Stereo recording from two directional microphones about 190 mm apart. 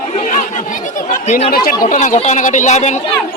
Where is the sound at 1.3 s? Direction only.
45° left (ahead or behind).